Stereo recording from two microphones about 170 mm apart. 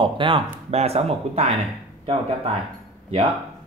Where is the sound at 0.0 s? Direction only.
30° right (ahead or behind).